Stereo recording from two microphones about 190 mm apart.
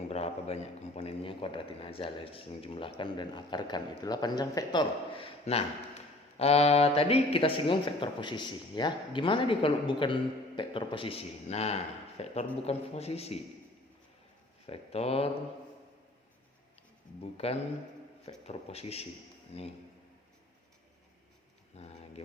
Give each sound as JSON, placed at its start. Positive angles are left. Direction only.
{"t": 0.1, "sound": "speech", "side_deg": 35}
{"t": 14.7, "sound": "speech", "side_deg": 30}
{"t": 17.3, "sound": "speech", "side_deg": 30}
{"t": 21.7, "sound": "speech", "side_deg": 35}